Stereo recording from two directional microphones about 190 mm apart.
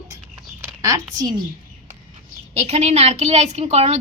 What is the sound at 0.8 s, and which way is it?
Speech, 15° right (ahead or behind).